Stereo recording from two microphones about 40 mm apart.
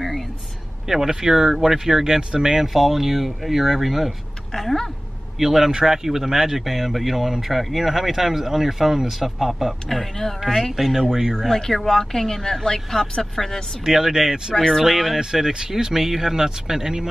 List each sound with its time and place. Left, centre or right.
0.8 s speech: centre
2.7 s speech: centre
4.6 s speech: centre
5.4 s speech: centre
9.8 s speech: centre
10.4 s speech: centre
11.4 s speech: centre
13.8 s speech: centre
14.5 s speech: centre
14.8 s speech: centre
15.1 s speech: centre